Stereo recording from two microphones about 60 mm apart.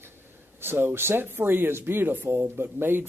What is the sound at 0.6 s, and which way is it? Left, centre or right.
A man's voice, right.